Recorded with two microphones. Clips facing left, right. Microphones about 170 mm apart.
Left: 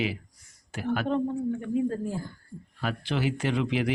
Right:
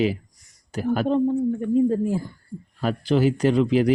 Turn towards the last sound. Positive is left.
turn(degrees=-40)  # may be behind; listen again after turning